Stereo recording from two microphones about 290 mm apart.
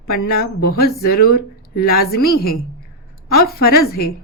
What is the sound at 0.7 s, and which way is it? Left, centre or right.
A woman's voice, left.